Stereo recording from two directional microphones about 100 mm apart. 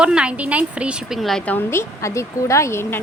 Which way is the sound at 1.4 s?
20° left (ahead or behind).